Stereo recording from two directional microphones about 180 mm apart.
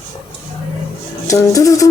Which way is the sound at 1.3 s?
20° left (ahead or behind).